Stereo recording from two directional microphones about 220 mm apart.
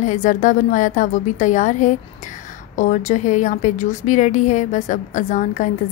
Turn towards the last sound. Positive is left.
turn(degrees=35)  # may be behind; listen again after turning